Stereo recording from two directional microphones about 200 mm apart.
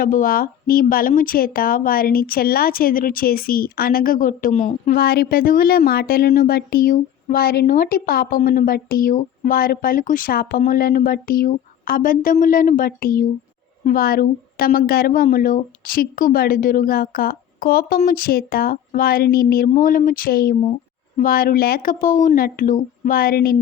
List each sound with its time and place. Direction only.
0.0 s speech: 45° left (ahead or behind)